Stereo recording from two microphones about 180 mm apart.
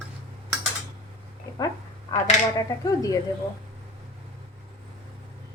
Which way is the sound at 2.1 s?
20° left (ahead or behind).